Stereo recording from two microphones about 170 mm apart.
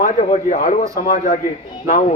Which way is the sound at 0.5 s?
45° left (ahead or behind).